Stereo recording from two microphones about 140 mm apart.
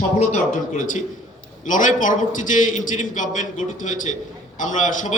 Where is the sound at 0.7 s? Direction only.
65° left (ahead or behind).